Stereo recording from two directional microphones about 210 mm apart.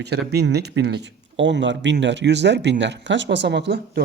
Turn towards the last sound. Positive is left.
turn(degrees=-55)  # may be behind; listen again after turning